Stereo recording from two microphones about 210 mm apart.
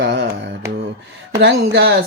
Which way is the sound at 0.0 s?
50° right (ahead or behind).